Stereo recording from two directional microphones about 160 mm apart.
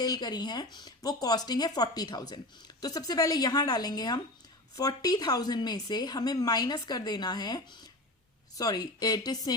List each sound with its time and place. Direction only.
0.0 s speech: 25° left (ahead or behind)